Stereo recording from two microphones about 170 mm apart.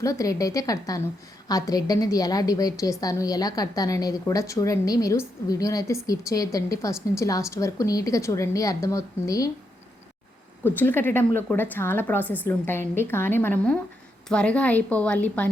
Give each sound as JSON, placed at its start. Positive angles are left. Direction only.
{"t": 0.0, "sound": "a woman's voice", "side_deg": 20}
{"t": 10.6, "sound": "a woman's voice", "side_deg": 10}